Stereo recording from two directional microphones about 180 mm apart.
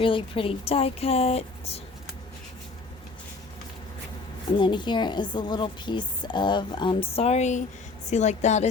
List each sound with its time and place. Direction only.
0.0 s speech: 30° left (ahead or behind)
4.5 s a woman's voice: 25° left (ahead or behind)